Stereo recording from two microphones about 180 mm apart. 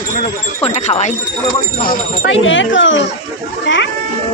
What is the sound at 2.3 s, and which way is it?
Speech, 90° left.